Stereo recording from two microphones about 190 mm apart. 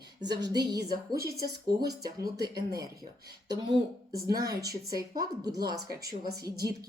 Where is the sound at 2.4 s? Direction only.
20° right (ahead or behind).